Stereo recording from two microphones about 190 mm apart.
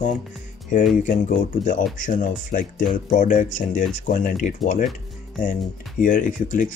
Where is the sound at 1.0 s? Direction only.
40° left (ahead or behind).